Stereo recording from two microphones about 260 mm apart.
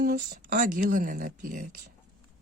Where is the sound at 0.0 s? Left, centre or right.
Right.